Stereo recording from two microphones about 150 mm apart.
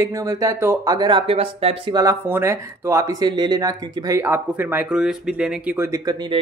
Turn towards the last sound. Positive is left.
turn(degrees=-20)  # may be behind; listen again after turning